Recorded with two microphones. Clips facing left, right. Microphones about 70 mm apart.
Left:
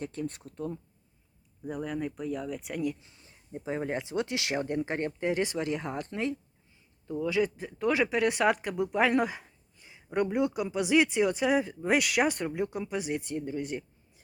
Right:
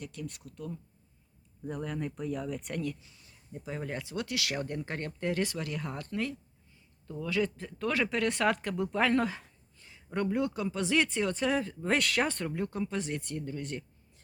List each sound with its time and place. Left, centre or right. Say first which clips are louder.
0.0 s speech: left 6 dB; left
1.6 s speech: left 2 dB; centre
3.0 s speech: left 1 dB; left